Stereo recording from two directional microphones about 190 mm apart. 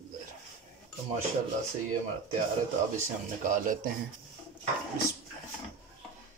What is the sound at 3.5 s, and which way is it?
Speech, 45° right (ahead or behind).